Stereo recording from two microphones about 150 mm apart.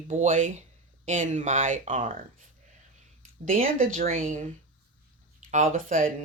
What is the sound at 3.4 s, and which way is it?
Speech, 65° right (ahead or behind).